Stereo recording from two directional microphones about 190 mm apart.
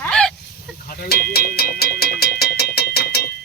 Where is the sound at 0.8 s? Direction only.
50° left (ahead or behind).